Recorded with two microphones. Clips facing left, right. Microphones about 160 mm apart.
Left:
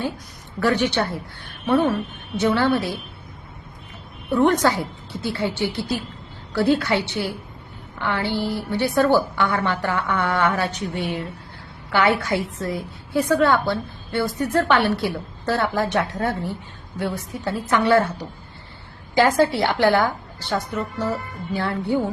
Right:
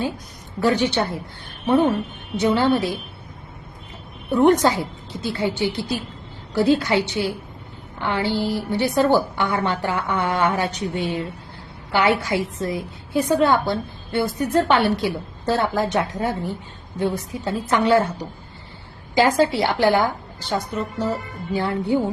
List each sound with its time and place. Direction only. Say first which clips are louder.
0.6 s a woman's voice: right 1 dB; 15° right (ahead or behind)
4.3 s a woman's voice: right 2 dB; 20° right (ahead or behind)
19.1 s a woman's voice: even; 15° right (ahead or behind)